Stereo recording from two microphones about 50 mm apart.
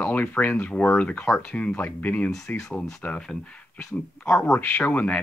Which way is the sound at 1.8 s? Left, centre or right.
Left.